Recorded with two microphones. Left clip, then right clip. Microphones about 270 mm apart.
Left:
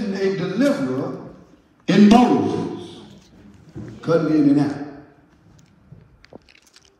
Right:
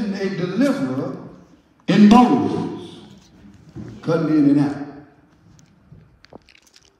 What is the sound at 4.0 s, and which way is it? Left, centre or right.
Speech, right.